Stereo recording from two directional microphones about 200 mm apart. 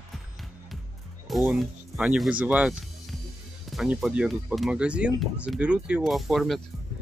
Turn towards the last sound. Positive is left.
turn(degrees=0)  # may be behind; listen again after turning